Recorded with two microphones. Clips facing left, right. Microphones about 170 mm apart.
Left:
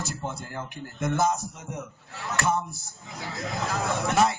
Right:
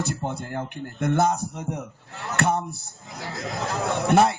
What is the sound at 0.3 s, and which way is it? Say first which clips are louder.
Speech: right 5 dB; 60° right (ahead or behind).